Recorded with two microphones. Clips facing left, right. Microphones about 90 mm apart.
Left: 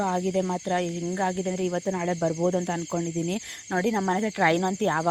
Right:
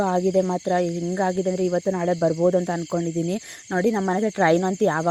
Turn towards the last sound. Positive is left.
turn(degrees=-15)  # may be behind; listen again after turning